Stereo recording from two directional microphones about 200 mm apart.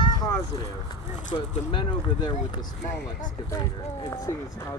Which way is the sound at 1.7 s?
20° left (ahead or behind).